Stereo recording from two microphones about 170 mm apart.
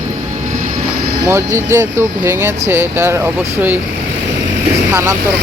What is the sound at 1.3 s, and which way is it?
Speech, 15° right (ahead or behind).